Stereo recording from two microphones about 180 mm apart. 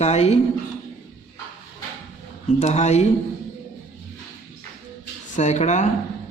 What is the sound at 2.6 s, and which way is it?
Speech, 40° left (ahead or behind).